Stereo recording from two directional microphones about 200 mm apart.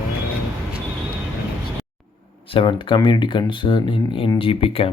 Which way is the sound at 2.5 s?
25° left (ahead or behind).